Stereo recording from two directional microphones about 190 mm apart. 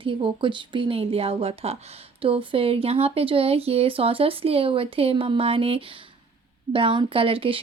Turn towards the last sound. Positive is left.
turn(degrees=-30)  # may be behind; listen again after turning